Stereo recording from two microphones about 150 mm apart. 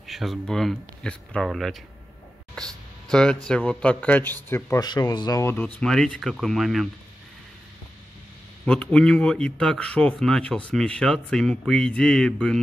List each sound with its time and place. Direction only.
0.0 s a man's voice: centre (ahead or behind)
2.5 s a sound: 5° left (ahead or behind)
3.4 s speech: 5° left (ahead or behind)
5.8 s a man's voice: 5° left (ahead or behind)
8.6 s a man's voice: 5° left (ahead or behind)